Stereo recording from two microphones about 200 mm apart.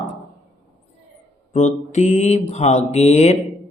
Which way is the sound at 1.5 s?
35° left (ahead or behind).